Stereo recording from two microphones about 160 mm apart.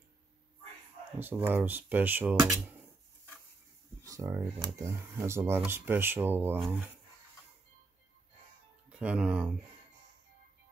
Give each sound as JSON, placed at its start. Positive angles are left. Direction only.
{"t": 1.2, "sound": "speech", "side_deg": -15}
{"t": 4.0, "sound": "speech", "side_deg": -20}
{"t": 8.9, "sound": "speech", "side_deg": -5}